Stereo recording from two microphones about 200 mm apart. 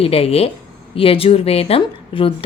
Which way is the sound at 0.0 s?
30° left (ahead or behind).